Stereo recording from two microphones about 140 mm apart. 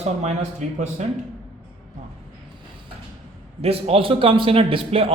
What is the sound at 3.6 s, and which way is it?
A man's voice, 45° right (ahead or behind).